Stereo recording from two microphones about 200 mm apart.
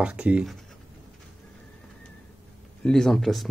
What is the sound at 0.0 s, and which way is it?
Speech, 5° right (ahead or behind).